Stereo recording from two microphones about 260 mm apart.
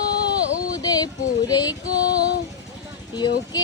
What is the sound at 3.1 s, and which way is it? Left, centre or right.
Female singing, centre.